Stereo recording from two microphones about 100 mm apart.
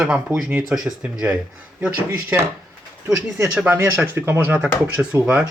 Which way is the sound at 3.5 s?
15° right (ahead or behind).